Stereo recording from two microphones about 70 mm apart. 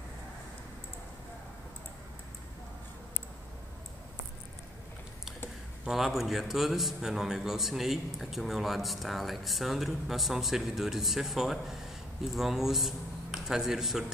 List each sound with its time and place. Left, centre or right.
5.9 s a man's voice: centre